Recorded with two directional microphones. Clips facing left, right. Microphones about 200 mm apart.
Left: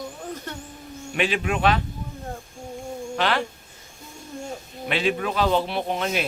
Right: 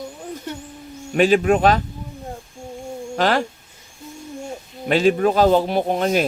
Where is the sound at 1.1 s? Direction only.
40° right (ahead or behind).